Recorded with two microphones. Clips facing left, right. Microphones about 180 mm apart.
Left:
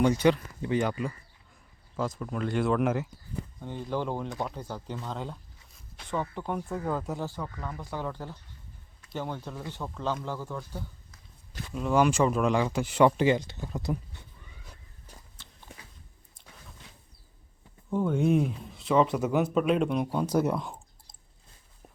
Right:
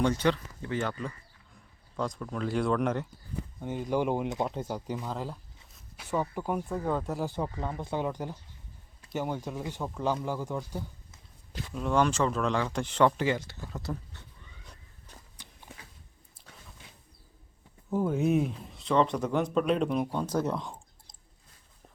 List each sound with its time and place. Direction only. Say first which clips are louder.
0.0 s speech: left 4 dB; 10° left (ahead or behind)
3.6 s speech: right 4 dB; 15° right (ahead or behind)
4.9 s speech: right 1 dB; 5° right (ahead or behind)
7.3 s speech: right 4 dB; 25° right (ahead or behind)
11.7 s speech: left 2 dB; 5° left (ahead or behind)
15.4 s walk: right 1 dB; 15° right (ahead or behind)
17.9 s speech: left 1 dB; 5° right (ahead or behind)